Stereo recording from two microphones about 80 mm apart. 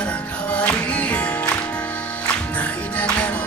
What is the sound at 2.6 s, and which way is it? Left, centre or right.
Music, centre.